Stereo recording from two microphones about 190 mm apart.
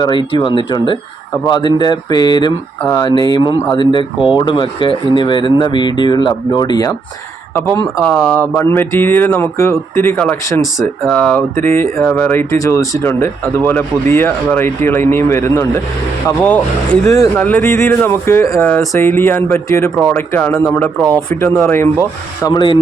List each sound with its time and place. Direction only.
0.0 s speech: 25° left (ahead or behind)
8.0 s speech: 10° left (ahead or behind)